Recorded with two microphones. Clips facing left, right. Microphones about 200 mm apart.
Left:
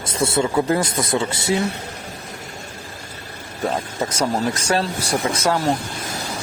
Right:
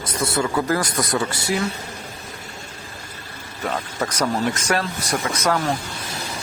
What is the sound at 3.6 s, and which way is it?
Speech, 25° left (ahead or behind).